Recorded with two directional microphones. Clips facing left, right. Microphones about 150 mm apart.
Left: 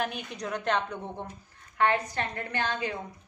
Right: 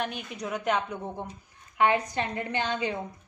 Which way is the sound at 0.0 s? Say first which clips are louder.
Even; centre (ahead or behind).